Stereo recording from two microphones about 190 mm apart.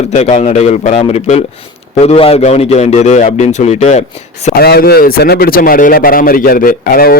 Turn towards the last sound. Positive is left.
turn(degrees=50)  # may be behind; listen again after turning